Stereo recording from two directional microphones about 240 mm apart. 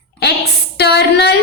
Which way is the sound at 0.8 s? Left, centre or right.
Left.